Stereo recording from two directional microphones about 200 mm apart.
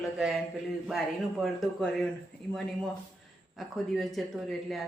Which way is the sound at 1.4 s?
Centre (ahead or behind).